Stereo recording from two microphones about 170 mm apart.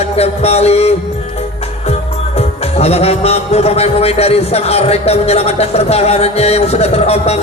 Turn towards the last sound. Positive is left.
turn(degrees=40)  # may be behind; listen again after turning